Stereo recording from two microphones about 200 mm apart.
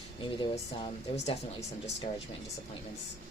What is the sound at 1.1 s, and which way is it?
Speech, 35° left (ahead or behind).